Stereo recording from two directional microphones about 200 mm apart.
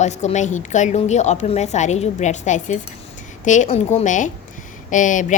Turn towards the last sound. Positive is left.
turn(degrees=40)  # may be behind; listen again after turning